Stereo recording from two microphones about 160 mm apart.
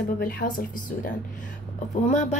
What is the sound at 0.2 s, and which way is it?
Speech, 65° left (ahead or behind).